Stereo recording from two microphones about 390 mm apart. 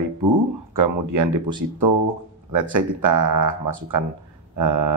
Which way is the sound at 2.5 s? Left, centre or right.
Right.